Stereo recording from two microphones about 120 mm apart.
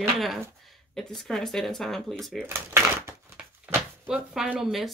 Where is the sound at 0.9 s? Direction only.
Centre (ahead or behind).